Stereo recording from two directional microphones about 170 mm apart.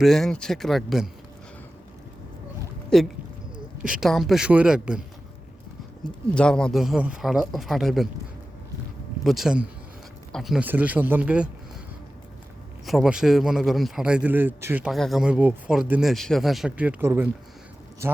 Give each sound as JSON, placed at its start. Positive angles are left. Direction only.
{"t": 0.0, "sound": "speech", "side_deg": 0}
{"t": 2.9, "sound": "speech", "side_deg": 5}
{"t": 6.3, "sound": "speech", "side_deg": 5}
{"t": 9.2, "sound": "speech", "side_deg": 0}
{"t": 12.8, "sound": "speech", "side_deg": 0}
{"t": 14.8, "sound": "speech", "side_deg": 0}